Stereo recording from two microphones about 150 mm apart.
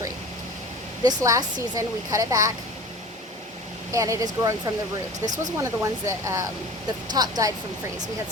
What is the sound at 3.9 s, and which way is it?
Speech, 20° right (ahead or behind).